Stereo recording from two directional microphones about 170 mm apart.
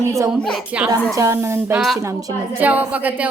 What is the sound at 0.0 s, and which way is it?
A woman's voice, 20° right (ahead or behind).